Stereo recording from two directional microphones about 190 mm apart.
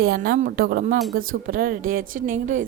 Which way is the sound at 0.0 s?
55° right (ahead or behind).